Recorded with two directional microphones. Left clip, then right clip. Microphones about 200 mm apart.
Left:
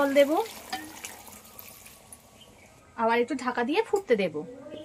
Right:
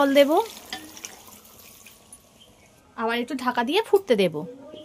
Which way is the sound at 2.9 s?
65° right (ahead or behind).